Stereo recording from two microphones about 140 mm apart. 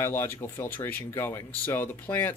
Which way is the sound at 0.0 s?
15° left (ahead or behind).